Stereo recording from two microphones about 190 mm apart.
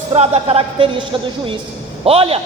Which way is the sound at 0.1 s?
30° right (ahead or behind).